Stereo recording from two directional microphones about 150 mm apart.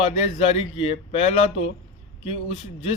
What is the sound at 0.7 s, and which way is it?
Speech, 40° left (ahead or behind).